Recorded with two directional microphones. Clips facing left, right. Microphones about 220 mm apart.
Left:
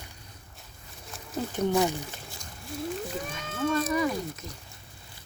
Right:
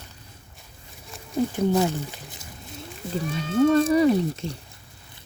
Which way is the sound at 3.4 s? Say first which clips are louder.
Right 10 dB; 30° right (ahead or behind).